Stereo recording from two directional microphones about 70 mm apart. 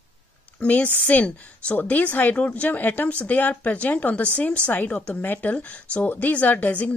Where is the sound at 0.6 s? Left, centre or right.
Centre.